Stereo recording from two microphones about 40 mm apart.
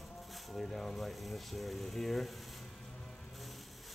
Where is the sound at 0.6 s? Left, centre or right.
Centre.